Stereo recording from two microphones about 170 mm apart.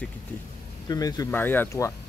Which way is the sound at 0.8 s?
20° left (ahead or behind).